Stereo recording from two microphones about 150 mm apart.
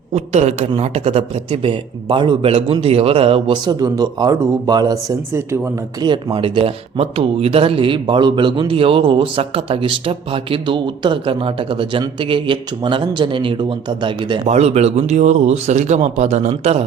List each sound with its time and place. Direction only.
0.1 s a man's voice: 45° right (ahead or behind); by 5.5 s 20° right (ahead or behind)
6.0 s speech: 30° right (ahead or behind)
14.4 s a man's voice: 45° right (ahead or behind)